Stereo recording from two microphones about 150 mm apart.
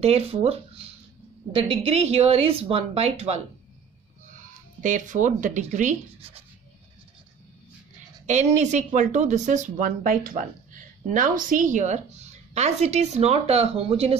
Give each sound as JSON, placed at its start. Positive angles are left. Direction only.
{"t": 0.0, "sound": "a woman's voice", "side_deg": -45}
{"t": 4.8, "sound": "speech", "side_deg": -55}
{"t": 8.3, "sound": "a woman's voice", "side_deg": -50}